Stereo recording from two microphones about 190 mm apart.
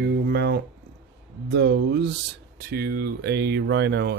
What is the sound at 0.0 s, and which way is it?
Guitar, 60° right (ahead or behind).